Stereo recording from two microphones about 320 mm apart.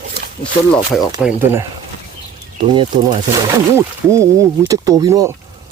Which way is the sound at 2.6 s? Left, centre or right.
Centre.